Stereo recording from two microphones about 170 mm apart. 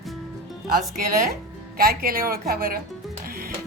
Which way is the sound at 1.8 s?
60° right (ahead or behind).